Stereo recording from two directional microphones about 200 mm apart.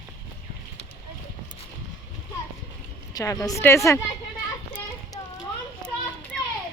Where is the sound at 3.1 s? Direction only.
15° left (ahead or behind).